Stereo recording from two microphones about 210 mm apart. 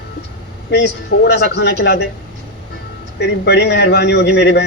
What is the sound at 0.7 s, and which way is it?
A man's voice, 50° left (ahead or behind).